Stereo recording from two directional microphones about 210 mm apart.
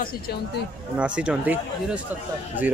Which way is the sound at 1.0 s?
5° right (ahead or behind).